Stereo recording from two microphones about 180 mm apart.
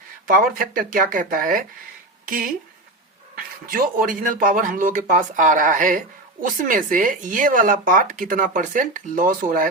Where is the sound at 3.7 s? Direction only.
50° right (ahead or behind).